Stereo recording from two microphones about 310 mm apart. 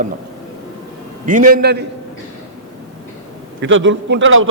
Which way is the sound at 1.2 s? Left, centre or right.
Right.